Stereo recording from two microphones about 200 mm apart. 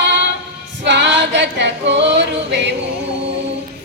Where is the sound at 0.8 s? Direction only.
60° right (ahead or behind).